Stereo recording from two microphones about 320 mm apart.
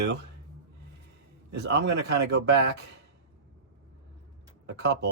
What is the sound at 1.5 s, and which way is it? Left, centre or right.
Speech, right.